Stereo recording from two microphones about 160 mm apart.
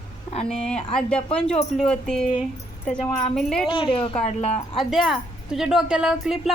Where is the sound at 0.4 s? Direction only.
5° left (ahead or behind).